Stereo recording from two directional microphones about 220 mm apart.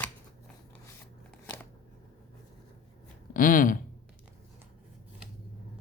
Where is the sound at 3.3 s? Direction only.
40° left (ahead or behind).